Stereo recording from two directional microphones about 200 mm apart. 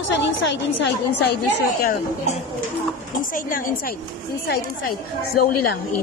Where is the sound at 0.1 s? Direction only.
60° left (ahead or behind).